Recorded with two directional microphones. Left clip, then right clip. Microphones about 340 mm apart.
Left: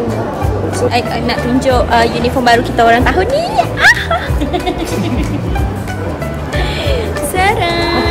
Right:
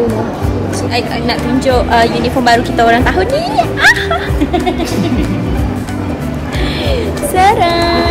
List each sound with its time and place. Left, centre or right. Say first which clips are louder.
0.9 s a woman's voice: even; centre
7.3 s a woman's voice: right 4 dB; centre